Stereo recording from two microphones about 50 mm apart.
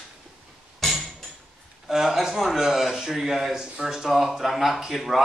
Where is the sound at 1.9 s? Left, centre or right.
Centre.